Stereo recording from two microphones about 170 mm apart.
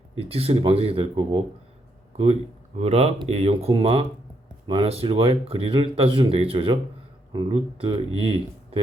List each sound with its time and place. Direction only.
0.2 s speech: 35° right (ahead or behind)
2.7 s speech: 40° right (ahead or behind)